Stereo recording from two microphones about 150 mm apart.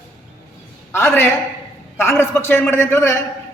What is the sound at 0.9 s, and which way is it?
A man's voice, 15° left (ahead or behind).